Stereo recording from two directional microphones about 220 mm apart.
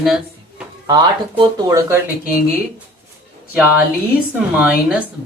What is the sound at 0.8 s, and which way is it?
Speech, 20° right (ahead or behind).